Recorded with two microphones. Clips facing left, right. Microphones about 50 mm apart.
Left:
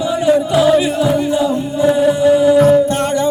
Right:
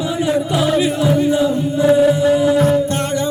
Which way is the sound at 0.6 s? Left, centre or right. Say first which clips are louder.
Left 4 dB; centre.